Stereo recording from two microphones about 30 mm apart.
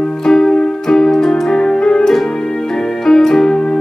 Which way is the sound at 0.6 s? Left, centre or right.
Centre.